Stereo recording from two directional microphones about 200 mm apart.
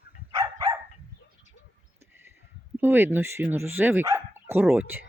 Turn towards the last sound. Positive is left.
turn(degrees=-10)  # may be behind; listen again after turning